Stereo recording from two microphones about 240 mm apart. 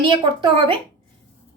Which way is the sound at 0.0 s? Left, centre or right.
Right.